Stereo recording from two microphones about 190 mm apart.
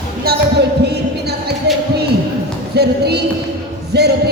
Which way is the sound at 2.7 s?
60° right (ahead or behind).